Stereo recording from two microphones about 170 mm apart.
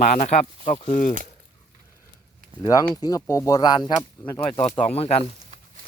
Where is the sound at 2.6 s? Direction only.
20° left (ahead or behind).